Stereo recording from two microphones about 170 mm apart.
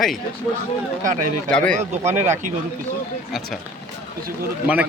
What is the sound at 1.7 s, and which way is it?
Speech, 45° right (ahead or behind).